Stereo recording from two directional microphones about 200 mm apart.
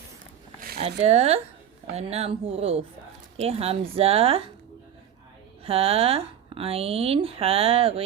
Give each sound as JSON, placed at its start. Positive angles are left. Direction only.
{"t": 0.8, "sound": "speech", "side_deg": -30}
{"t": 5.6, "sound": "speech", "side_deg": -30}